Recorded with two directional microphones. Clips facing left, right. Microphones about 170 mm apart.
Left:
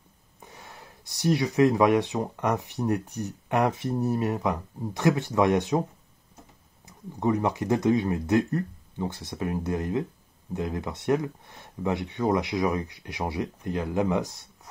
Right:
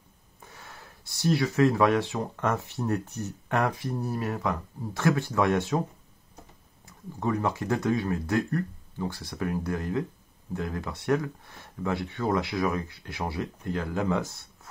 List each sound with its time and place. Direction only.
0.4 s speech: 20° left (ahead or behind)
6.9 s speech: 20° left (ahead or behind)